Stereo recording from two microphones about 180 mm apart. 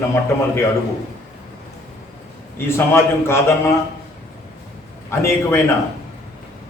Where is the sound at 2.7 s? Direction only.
15° left (ahead or behind).